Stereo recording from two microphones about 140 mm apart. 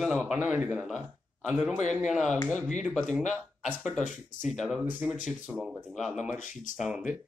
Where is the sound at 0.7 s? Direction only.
Centre (ahead or behind).